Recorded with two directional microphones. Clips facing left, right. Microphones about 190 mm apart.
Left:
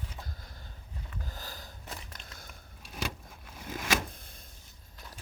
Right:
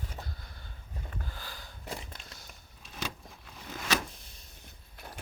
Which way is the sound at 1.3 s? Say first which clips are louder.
Left 1 dB; 40° left (ahead or behind).